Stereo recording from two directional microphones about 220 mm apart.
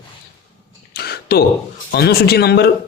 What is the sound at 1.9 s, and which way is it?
Speech, 45° left (ahead or behind).